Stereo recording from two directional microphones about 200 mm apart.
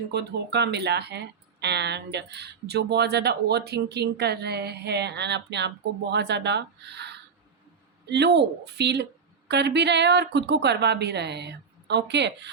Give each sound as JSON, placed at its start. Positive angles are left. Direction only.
{"t": 0.1, "sound": "speech", "side_deg": -60}